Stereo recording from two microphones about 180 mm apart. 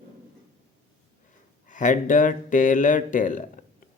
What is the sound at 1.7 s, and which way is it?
Speech, 45° left (ahead or behind).